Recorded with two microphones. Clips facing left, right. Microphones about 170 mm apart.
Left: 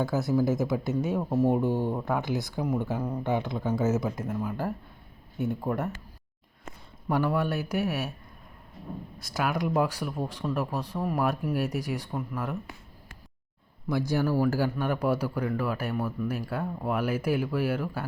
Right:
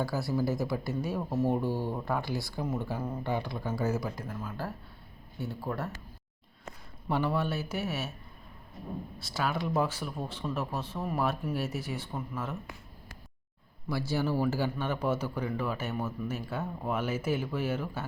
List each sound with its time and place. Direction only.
0.0 s a man's voice: 20° left (ahead or behind)
7.1 s a man's voice: 10° left (ahead or behind)
9.1 s a man's voice: 15° left (ahead or behind)
13.8 s a man's voice: 15° left (ahead or behind)